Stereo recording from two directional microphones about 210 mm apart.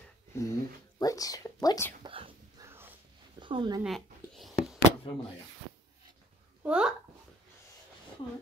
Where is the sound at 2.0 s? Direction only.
25° right (ahead or behind).